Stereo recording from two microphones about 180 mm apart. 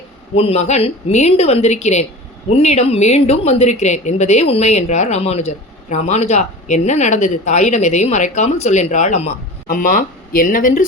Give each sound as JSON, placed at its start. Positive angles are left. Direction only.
{"t": 0.3, "sound": "speech", "side_deg": 35}